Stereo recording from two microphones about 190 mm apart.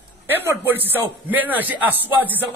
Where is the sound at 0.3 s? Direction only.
10° right (ahead or behind).